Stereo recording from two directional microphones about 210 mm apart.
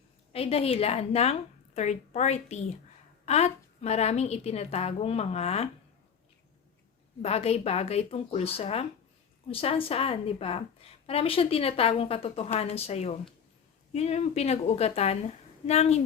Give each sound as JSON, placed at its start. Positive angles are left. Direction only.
{"t": 0.3, "sound": "a woman's voice", "side_deg": 30}
{"t": 7.2, "sound": "a woman's voice", "side_deg": 30}